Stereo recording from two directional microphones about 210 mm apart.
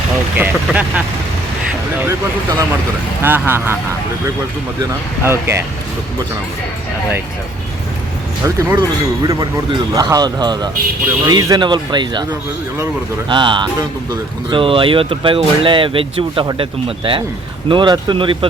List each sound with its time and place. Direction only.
0.3 s speech: 5° right (ahead or behind)
2.0 s speech: 20° right (ahead or behind)
4.8 s speech: 10° right (ahead or behind)
8.4 s speech: 15° right (ahead or behind)
9.9 s speech: 15° right (ahead or behind)
13.2 s speech: 20° right (ahead or behind)